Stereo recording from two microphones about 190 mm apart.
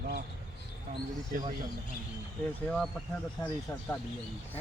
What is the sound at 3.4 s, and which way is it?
Speech, 20° left (ahead or behind).